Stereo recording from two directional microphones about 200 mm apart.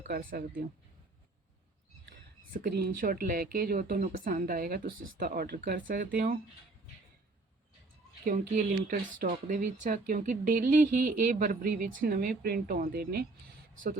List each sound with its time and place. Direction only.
0.0 s speech: 40° right (ahead or behind)
2.0 s speech: 45° right (ahead or behind)
8.2 s a woman's voice: 40° right (ahead or behind)